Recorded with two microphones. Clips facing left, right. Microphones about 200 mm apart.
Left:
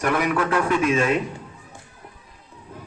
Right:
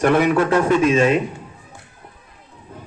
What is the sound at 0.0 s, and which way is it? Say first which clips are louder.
A man's voice: right 6 dB; 25° right (ahead or behind).